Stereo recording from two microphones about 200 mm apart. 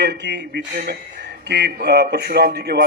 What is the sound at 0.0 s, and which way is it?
A man's voice, 60° right (ahead or behind).